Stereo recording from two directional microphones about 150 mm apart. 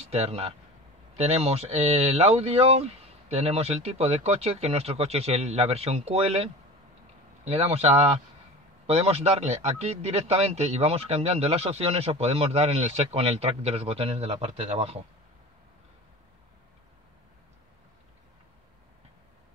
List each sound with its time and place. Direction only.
0.1 s a man's voice: 40° right (ahead or behind)